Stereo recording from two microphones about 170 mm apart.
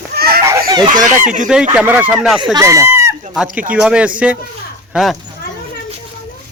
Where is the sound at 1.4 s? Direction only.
5° right (ahead or behind).